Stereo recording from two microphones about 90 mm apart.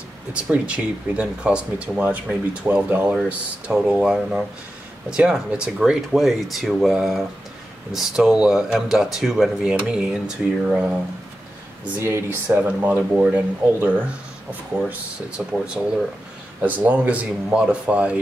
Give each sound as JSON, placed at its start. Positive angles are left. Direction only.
{"t": 0.3, "sound": "speech", "side_deg": -10}
{"t": 12.0, "sound": "speech", "side_deg": -30}
{"t": 12.4, "sound": "speech", "side_deg": -20}